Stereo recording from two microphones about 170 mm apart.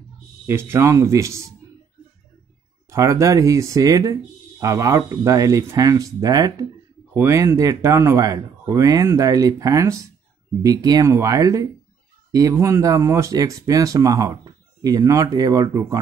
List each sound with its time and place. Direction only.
0.5 s speech: 15° right (ahead or behind)
2.9 s speech: 20° right (ahead or behind)